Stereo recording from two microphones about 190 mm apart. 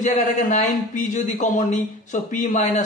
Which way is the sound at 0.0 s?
40° left (ahead or behind).